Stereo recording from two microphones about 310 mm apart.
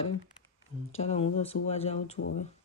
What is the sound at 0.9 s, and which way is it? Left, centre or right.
Speech, centre.